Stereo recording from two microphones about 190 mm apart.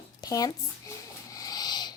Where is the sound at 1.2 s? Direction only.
20° left (ahead or behind).